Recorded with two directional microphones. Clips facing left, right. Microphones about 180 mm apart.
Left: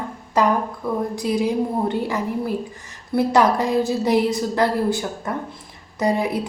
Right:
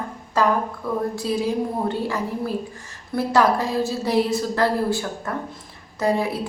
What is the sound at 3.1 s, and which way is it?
A woman's voice, 20° left (ahead or behind).